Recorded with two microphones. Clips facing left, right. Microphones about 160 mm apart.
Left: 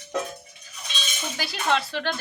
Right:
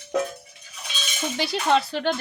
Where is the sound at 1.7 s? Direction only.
20° right (ahead or behind).